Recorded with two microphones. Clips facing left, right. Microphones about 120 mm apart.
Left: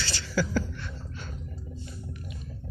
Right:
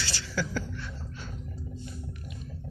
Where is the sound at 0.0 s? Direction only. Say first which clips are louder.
Left 1 dB; 10° right (ahead or behind).